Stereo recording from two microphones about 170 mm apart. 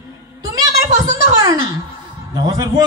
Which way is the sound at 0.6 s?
20° right (ahead or behind).